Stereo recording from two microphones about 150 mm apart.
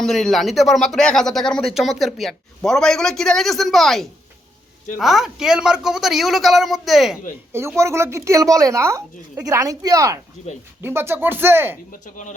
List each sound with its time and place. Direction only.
0.0 s speech: centre (ahead or behind)
7.8 s a woman's voice: 20° right (ahead or behind)
11.9 s speech: 60° left (ahead or behind)